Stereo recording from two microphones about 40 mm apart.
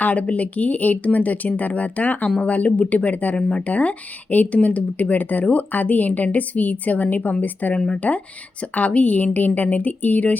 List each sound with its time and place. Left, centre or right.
0.0 s speech: left